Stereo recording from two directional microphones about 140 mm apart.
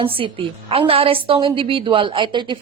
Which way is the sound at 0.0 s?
40° right (ahead or behind).